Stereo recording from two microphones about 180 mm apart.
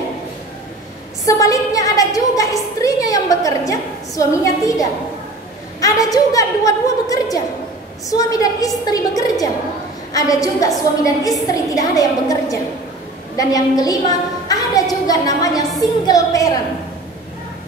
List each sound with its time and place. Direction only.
1.2 s a woman's voice: 20° left (ahead or behind)